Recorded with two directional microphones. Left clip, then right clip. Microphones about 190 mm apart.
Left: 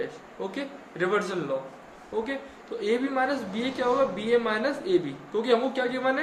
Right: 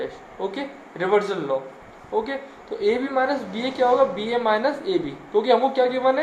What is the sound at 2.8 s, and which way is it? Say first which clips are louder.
Speech: right 5 dB; 15° right (ahead or behind).